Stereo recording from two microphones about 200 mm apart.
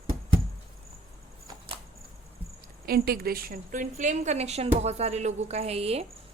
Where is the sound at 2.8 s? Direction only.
50° right (ahead or behind).